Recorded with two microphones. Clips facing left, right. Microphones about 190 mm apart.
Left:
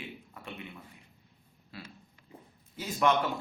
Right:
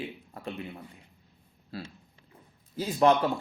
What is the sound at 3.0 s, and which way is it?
Speech, 35° right (ahead or behind).